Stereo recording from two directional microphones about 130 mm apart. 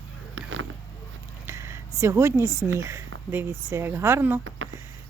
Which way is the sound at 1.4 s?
20° right (ahead or behind).